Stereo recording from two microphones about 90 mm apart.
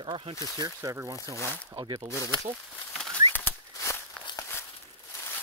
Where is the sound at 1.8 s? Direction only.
90° right.